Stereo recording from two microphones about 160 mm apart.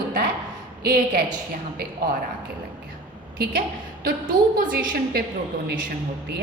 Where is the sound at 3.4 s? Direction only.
70° right (ahead or behind).